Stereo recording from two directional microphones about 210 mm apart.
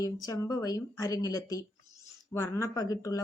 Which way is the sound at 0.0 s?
15° left (ahead or behind).